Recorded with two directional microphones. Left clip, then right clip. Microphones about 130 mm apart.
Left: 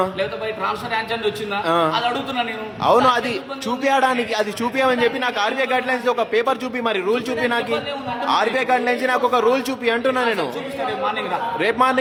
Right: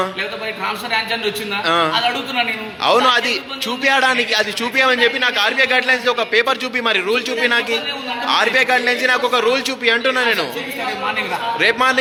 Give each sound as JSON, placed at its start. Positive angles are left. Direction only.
{"t": 0.2, "sound": "a man's voice", "side_deg": 15}
{"t": 1.6, "sound": "a man's voice", "side_deg": 35}
{"t": 1.9, "sound": "a man's voice", "side_deg": 15}
{"t": 2.8, "sound": "a man's voice", "side_deg": 35}
{"t": 11.6, "sound": "a man's voice", "side_deg": 30}